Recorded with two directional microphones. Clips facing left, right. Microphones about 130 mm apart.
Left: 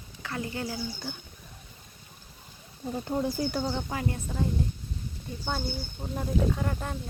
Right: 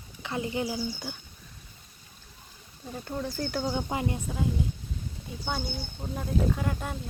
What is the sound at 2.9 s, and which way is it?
Speech, 20° left (ahead or behind).